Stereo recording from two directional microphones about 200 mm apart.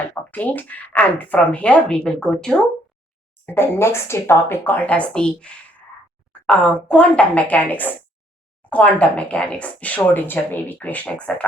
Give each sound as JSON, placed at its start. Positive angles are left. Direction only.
{"t": 0.3, "sound": "speech", "side_deg": 10}